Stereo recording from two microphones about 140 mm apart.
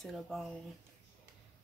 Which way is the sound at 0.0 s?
Centre (ahead or behind).